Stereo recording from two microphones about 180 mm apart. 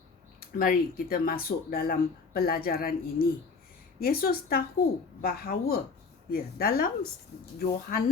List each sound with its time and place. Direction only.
0.3 s a woman's voice: 50° left (ahead or behind)